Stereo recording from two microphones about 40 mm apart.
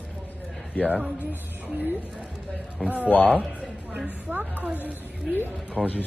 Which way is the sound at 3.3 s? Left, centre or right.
Centre.